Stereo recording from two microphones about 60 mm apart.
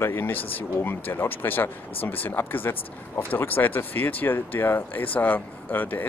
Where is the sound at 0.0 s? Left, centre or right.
Left.